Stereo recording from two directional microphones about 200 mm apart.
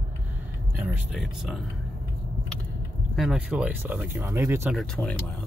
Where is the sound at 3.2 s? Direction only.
5° right (ahead or behind).